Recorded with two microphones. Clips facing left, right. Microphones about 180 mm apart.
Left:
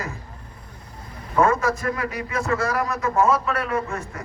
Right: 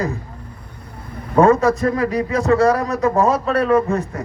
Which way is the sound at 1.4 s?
35° right (ahead or behind).